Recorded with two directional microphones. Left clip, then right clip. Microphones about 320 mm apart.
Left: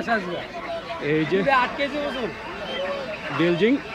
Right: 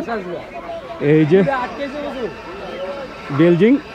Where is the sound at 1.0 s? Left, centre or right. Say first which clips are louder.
Right 10 dB; right.